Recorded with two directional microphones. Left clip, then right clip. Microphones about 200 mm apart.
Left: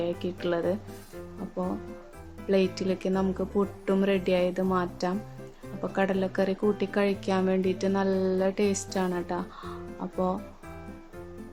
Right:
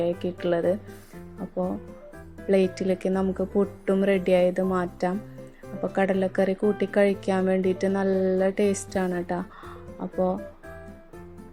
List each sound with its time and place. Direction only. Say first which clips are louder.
0.0 s a woman's voice: right 4 dB; 15° right (ahead or behind)
2.5 s a woman's voice: right 3 dB; 15° right (ahead or behind)